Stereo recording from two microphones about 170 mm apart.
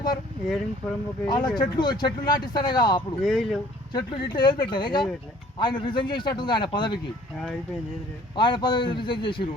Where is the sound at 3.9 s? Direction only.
25° left (ahead or behind).